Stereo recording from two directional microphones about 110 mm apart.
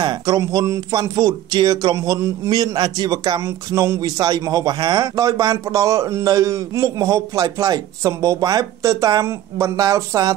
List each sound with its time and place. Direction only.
0.0 s speech: 35° right (ahead or behind)